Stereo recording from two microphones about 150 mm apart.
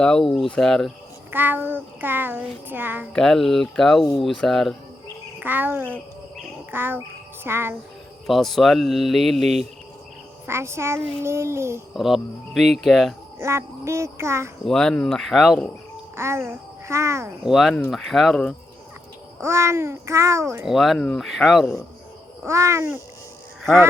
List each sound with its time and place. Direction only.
0.0 s speech: 5° left (ahead or behind)
1.3 s a child's voice: 15° right (ahead or behind)
3.1 s speech: 5° left (ahead or behind)
5.4 s a child's voice: 10° right (ahead or behind)
8.3 s speech: centre (ahead or behind)
10.4 s a child's voice: 15° right (ahead or behind)
11.9 s speech: centre (ahead or behind)
13.4 s a child's voice: 20° right (ahead or behind)
14.6 s speech: 5° left (ahead or behind)
16.1 s a child's voice: 15° right (ahead or behind)
17.4 s speech: centre (ahead or behind)
19.4 s a child's voice: 20° right (ahead or behind)
20.7 s speech: centre (ahead or behind)
22.4 s a child's voice: 20° right (ahead or behind)